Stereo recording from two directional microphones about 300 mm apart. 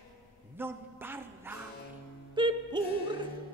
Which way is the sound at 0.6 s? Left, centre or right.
Centre.